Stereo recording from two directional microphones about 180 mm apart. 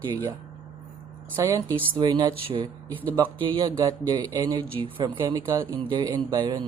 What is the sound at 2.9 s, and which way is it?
Speech, 10° left (ahead or behind).